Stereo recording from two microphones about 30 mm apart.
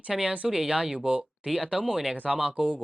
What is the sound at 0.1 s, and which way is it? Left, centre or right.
Speech, right.